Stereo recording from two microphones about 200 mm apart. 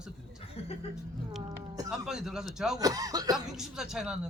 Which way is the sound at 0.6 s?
30° left (ahead or behind).